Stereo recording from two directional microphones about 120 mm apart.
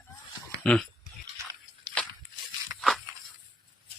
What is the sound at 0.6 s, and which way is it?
Speech, 10° left (ahead or behind).